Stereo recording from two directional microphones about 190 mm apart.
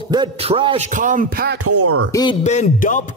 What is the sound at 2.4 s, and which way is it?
Speech, 40° left (ahead or behind).